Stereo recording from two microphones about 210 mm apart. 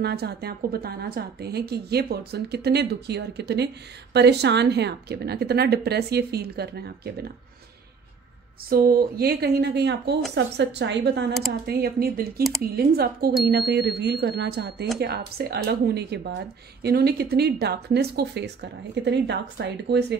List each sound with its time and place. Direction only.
0.0 s a woman's voice: 50° right (ahead or behind)
8.6 s a woman's voice: 45° right (ahead or behind)